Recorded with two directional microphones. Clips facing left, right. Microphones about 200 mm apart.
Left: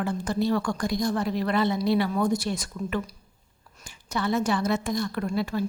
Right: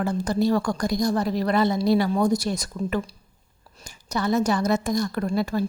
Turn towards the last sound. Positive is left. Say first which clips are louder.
# right 3 dB
turn(degrees=-40)  # may be behind; listen again after turning